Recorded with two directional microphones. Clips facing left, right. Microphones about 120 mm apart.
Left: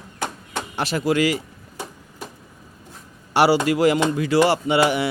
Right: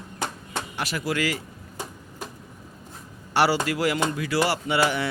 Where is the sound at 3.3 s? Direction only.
15° left (ahead or behind).